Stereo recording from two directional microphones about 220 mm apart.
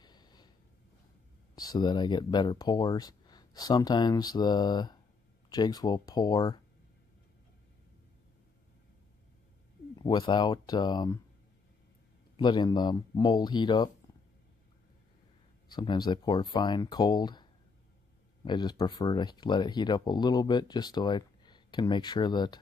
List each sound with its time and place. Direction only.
0.0 s snort: 20° left (ahead or behind)
1.5 s speech: 20° left (ahead or behind)
9.9 s speech: 20° left (ahead or behind)
12.4 s speech: 20° left (ahead or behind)
15.7 s speech: 20° left (ahead or behind)